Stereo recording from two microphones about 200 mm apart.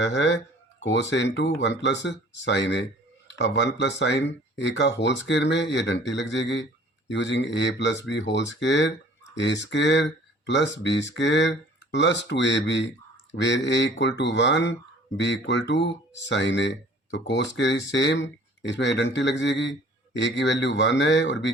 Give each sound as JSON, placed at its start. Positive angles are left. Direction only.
{"t": 0.0, "sound": "speech", "side_deg": 65}